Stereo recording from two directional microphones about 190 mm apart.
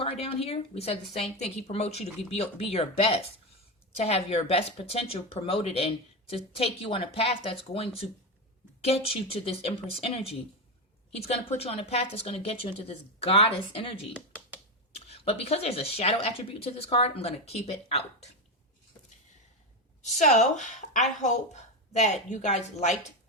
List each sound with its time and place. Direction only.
0.0 s speech: 30° left (ahead or behind)
14.9 s speech: 30° left (ahead or behind)
20.0 s speech: 40° left (ahead or behind)